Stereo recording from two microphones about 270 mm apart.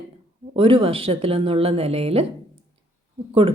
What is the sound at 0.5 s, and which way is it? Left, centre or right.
A woman's voice, centre.